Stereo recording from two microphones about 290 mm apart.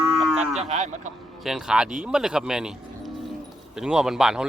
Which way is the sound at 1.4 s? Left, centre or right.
Centre.